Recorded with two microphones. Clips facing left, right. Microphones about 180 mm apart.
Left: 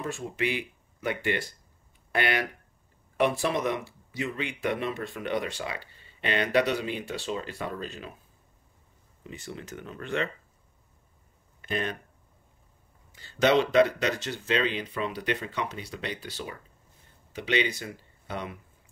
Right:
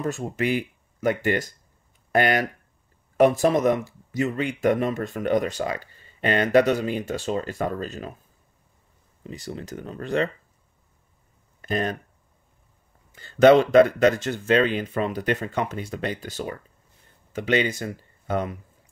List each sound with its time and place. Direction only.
0.0 s speech: 45° right (ahead or behind)
9.2 s speech: 35° right (ahead or behind)
11.6 s speech: 40° right (ahead or behind)
13.1 s speech: 50° right (ahead or behind)